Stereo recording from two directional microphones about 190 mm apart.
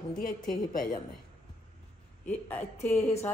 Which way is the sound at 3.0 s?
35° left (ahead or behind).